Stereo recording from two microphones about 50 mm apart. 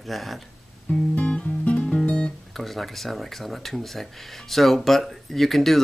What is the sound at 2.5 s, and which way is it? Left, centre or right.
Speech, centre.